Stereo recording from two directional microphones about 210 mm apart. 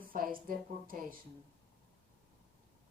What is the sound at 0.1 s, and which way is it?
Speech, 40° right (ahead or behind).